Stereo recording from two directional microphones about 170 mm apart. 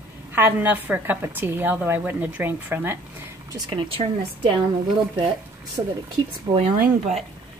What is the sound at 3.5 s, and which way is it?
Speech, 30° right (ahead or behind).